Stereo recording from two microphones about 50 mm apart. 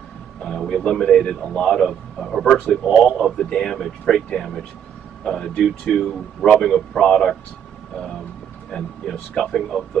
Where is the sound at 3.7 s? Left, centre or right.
Centre.